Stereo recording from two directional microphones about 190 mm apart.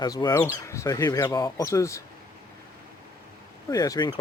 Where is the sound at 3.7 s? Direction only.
20° left (ahead or behind).